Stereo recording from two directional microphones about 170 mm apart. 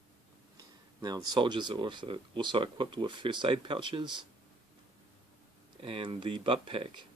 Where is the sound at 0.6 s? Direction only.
25° right (ahead or behind).